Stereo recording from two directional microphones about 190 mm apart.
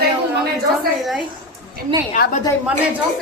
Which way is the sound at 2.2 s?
45° left (ahead or behind).